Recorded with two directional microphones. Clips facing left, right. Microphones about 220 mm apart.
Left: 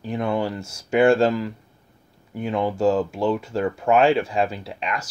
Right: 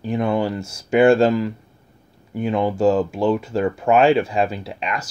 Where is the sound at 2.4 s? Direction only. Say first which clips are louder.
Right 3 dB; 20° right (ahead or behind).